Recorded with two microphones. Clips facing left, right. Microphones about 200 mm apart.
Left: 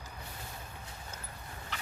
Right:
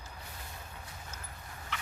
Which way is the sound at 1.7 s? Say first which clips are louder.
Right 2 dB; 35° left (ahead or behind).